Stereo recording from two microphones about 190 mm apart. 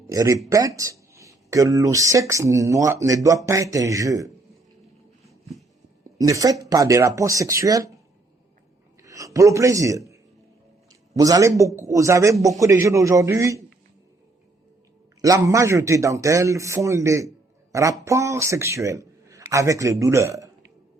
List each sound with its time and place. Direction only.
0.1 s speech: 15° right (ahead or behind)
5.2 s a sound: centre (ahead or behind)
6.1 s speech: 15° right (ahead or behind)
9.0 s a man's voice: 15° right (ahead or behind)
11.2 s speech: 20° right (ahead or behind)
15.2 s speech: 15° right (ahead or behind)
17.7 s a sound: 15° right (ahead or behind)
18.0 s speech: 15° right (ahead or behind)